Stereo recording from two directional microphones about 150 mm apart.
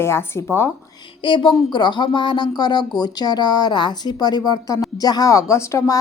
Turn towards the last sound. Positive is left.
turn(degrees=20)  # may be behind; listen again after turning